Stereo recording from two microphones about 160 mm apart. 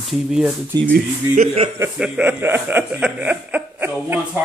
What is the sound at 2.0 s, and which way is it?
Speech, 5° right (ahead or behind).